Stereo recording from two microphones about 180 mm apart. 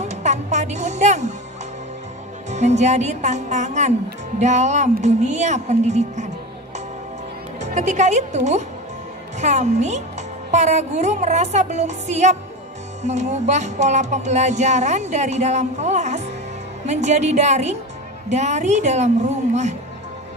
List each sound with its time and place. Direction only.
0.0 s music: 40° right (ahead or behind)
2.5 s speech: 40° right (ahead or behind)
7.6 s speech: 40° right (ahead or behind)